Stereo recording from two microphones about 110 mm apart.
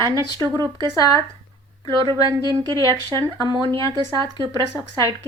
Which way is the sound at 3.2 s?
40° right (ahead or behind).